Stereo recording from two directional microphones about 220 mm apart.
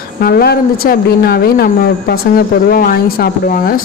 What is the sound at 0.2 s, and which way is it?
A woman's voice, 45° left (ahead or behind).